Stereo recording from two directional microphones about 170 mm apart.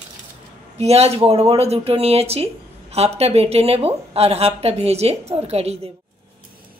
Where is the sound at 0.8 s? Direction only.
40° right (ahead or behind).